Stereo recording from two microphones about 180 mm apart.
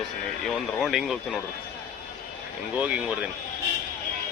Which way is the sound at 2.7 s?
5° right (ahead or behind).